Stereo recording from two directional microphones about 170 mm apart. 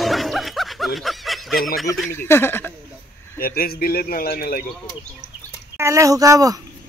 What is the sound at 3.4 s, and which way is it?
Speech, 60° left (ahead or behind).